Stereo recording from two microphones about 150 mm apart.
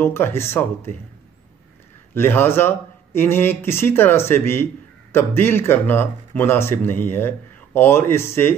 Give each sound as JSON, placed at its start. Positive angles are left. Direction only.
{"t": 0.0, "sound": "speech", "side_deg": 15}
{"t": 2.1, "sound": "speech", "side_deg": 15}